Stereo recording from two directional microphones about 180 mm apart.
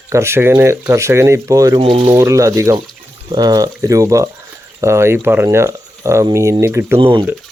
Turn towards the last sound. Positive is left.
turn(degrees=-25)  # may be behind; listen again after turning